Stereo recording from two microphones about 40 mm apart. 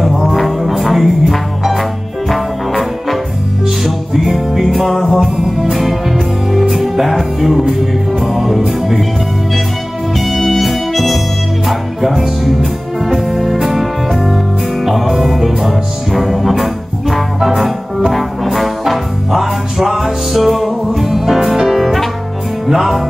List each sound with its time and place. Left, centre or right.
0.4 s music: centre
10.1 s music: centre
18.1 s trombone: centre
22.7 s music: centre